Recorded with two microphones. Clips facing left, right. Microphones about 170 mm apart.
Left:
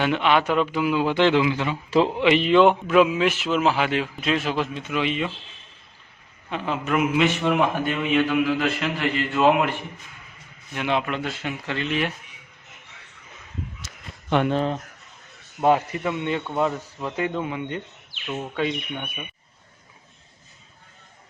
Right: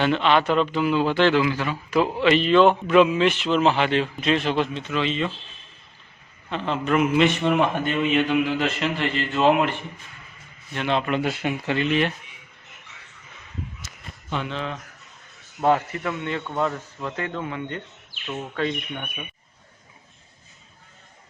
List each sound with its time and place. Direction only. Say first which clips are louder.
0.0 s a man's voice: right 1 dB; 10° left (ahead or behind)
2.8 s a man's voice: right 1 dB; 5° left (ahead or behind)
6.5 s a man's voice: right 2 dB; 10° left (ahead or behind)
10.8 s a man's voice: even; 10° left (ahead or behind)
11.0 s a man's voice: right 4 dB; 5° right (ahead or behind)
14.3 s speech: left 8 dB; 60° left (ahead or behind)
14.5 s a man's voice: left 7 dB; 40° left (ahead or behind)
15.6 s a man's voice: left 1 dB; 15° left (ahead or behind)